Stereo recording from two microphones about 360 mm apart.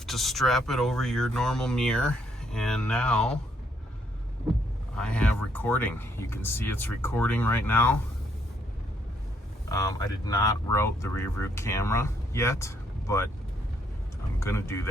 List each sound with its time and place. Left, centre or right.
0.0 s speech: centre
4.9 s speech: centre
9.6 s speech: centre
14.3 s speech: centre